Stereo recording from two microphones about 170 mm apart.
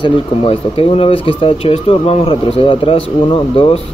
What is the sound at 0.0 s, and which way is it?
Speech, 30° left (ahead or behind).